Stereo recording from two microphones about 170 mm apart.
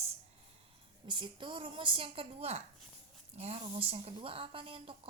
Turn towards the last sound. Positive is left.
turn(degrees=-30)  # may be behind; listen again after turning